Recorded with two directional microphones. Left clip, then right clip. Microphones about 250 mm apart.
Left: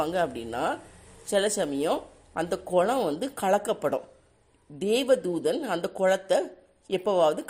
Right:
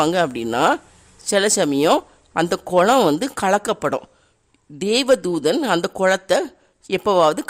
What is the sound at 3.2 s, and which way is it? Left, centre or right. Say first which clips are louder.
A man's voice: right 6 dB; right.